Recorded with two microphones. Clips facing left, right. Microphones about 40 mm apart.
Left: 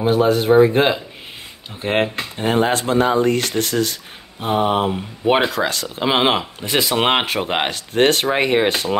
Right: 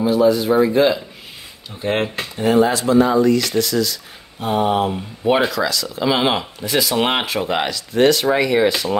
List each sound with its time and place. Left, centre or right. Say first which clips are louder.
0.0 s speech: right 1 dB; left
1.8 s mantra: left 1 dB; left
2.3 s speech: right 3 dB; left
4.4 s mantra: even; left
5.5 s speech: even; left
6.0 s mantra: left 1 dB; left
6.6 s speech: right 2 dB; left
7.0 s mantra: left 3 dB; left
7.2 s speech: even; left